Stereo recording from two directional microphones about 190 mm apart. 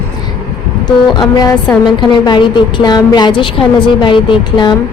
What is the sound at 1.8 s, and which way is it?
A woman's voice, 25° left (ahead or behind).